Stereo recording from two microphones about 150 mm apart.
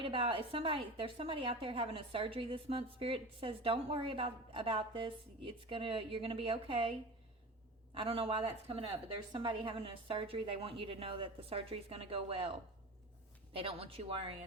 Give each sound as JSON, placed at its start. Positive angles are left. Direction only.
{"t": 0.0, "sound": "a woman's voice", "side_deg": -35}
{"t": 7.9, "sound": "a woman's voice", "side_deg": -40}